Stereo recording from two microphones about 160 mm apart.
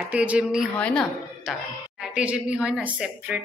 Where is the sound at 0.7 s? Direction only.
5° left (ahead or behind).